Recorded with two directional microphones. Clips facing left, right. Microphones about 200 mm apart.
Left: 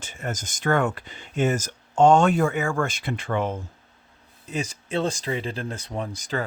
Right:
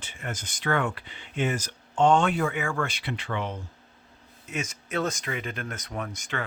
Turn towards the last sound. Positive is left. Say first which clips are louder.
# left 4 dB
turn(degrees=35)  # may be behind; listen again after turning